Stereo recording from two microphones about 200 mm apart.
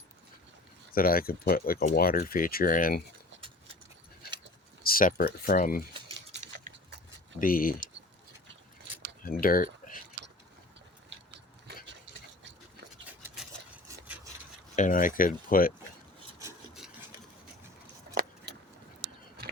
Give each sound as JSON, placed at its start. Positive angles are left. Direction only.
{"t": 0.9, "sound": "speech", "side_deg": 45}
{"t": 4.8, "sound": "speech", "side_deg": 45}
{"t": 7.3, "sound": "speech", "side_deg": 45}
{"t": 9.2, "sound": "speech", "side_deg": 45}
{"t": 12.0, "sound": "a sound", "side_deg": -65}
{"t": 13.2, "sound": "a sound", "side_deg": -5}
{"t": 14.8, "sound": "speech", "side_deg": 40}
{"t": 18.1, "sound": "vehicle", "side_deg": -45}